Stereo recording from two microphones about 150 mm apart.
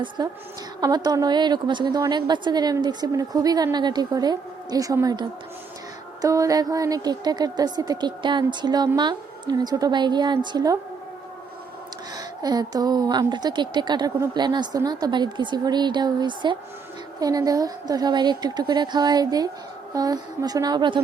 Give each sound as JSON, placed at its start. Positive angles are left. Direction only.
{"t": 0.2, "sound": "a woman's voice", "side_deg": -25}
{"t": 6.2, "sound": "a woman's voice", "side_deg": -20}
{"t": 12.1, "sound": "a woman's voice", "side_deg": -25}